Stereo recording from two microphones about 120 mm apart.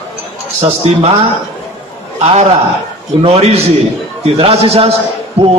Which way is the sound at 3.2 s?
55° right (ahead or behind).